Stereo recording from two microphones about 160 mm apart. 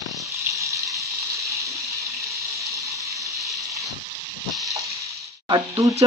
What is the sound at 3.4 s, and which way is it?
Water, centre (ahead or behind).